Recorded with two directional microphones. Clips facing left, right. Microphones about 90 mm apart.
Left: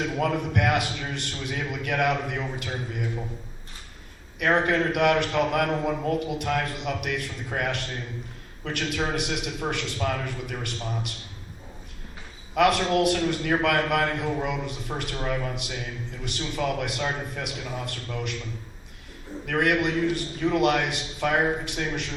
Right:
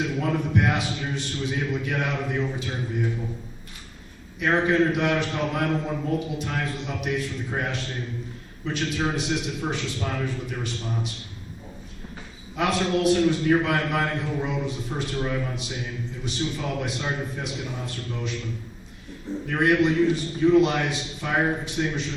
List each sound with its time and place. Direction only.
0.2 s a man's voice: 65° left (ahead or behind)
4.4 s a man's voice: 60° left (ahead or behind)
12.5 s a man's voice: 60° left (ahead or behind)
19.5 s a man's voice: 60° left (ahead or behind)